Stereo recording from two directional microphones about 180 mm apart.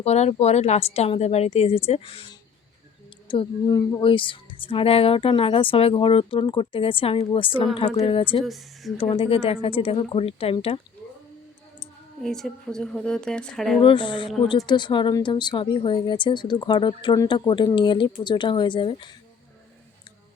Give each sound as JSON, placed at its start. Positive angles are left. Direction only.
{"t": 0.0, "sound": "a woman's voice", "side_deg": 35}
{"t": 3.2, "sound": "a woman's voice", "side_deg": 25}
{"t": 8.4, "sound": "a woman's voice", "side_deg": 0}
{"t": 9.0, "sound": "a woman's voice", "side_deg": 30}
{"t": 12.2, "sound": "a woman's voice", "side_deg": 5}
{"t": 13.8, "sound": "a woman's voice", "side_deg": 25}